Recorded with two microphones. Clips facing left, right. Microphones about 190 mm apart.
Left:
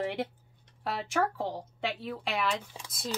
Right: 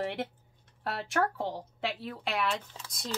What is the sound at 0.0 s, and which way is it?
Speech, centre (ahead or behind).